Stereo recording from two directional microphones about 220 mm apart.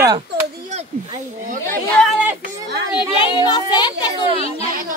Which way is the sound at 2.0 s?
5° right (ahead or behind).